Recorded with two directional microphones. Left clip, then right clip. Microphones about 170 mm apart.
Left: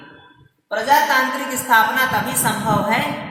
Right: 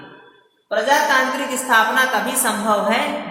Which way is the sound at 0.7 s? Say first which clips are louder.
Even; 15° right (ahead or behind).